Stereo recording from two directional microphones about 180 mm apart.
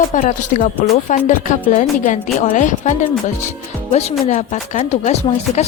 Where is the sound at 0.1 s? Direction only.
45° left (ahead or behind).